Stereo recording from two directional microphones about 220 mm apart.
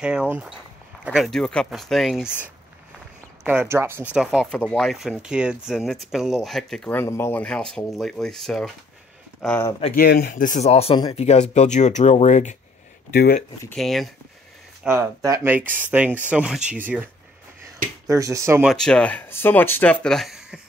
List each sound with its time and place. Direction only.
0.0 s speech: 5° right (ahead or behind)
9.7 s speech: 25° left (ahead or behind)
9.9 s speech: 45° left (ahead or behind)
13.1 s speech: 45° left (ahead or behind)
13.7 s speech: centre (ahead or behind)
14.8 s speech: 10° right (ahead or behind)
18.7 s speech: 5° left (ahead or behind)